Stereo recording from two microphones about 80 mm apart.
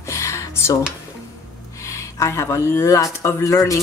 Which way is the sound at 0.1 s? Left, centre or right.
Left.